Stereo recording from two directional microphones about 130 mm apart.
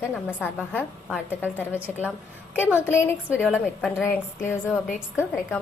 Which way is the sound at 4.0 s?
20° left (ahead or behind).